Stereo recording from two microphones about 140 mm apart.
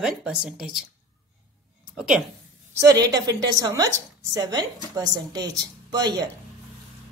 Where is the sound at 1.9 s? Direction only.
5° right (ahead or behind).